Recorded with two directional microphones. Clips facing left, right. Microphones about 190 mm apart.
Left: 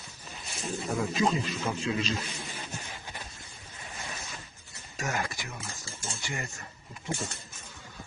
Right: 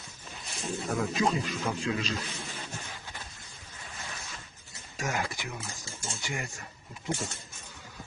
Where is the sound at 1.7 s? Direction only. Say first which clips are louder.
Even; 10° left (ahead or behind).